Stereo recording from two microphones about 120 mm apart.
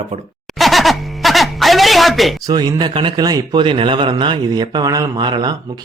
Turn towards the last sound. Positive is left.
turn(degrees=-40)  # may be behind; listen again after turning